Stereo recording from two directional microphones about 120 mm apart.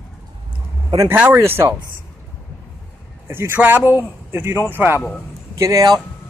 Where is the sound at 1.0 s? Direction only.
15° right (ahead or behind).